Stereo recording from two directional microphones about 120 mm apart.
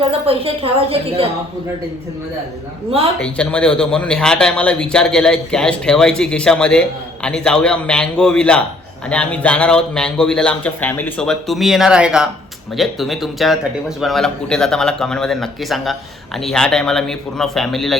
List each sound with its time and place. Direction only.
0.1 s a woman's voice: 55° right (ahead or behind)
3.2 s speech: 10° left (ahead or behind)
11.2 s a man's voice: 5° left (ahead or behind)